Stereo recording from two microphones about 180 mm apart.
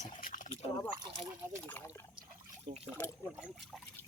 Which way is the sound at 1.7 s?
10° left (ahead or behind).